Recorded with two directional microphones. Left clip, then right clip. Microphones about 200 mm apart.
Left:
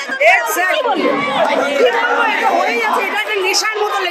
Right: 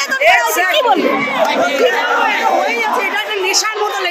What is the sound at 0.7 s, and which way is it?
Speech, 30° right (ahead or behind).